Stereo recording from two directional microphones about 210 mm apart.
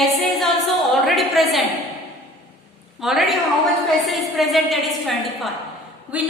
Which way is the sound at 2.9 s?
Centre (ahead or behind).